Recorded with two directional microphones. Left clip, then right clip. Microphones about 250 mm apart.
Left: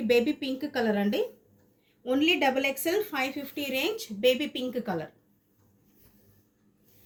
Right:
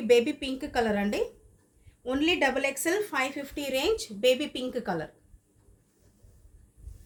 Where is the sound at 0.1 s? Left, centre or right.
Right.